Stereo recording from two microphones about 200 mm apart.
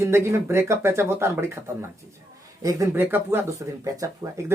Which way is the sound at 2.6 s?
15° right (ahead or behind).